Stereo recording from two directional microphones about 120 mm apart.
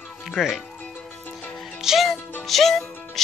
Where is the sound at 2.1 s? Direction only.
15° left (ahead or behind).